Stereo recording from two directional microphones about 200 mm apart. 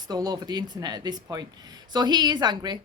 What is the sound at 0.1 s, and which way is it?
Speech, 20° right (ahead or behind).